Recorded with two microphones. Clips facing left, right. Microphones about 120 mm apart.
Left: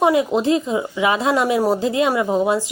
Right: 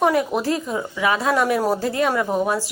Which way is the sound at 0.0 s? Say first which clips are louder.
Left 2 dB; 15° left (ahead or behind).